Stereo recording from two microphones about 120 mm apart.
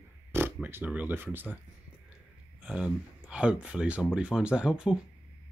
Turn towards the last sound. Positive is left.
turn(degrees=-5)  # may be behind; listen again after turning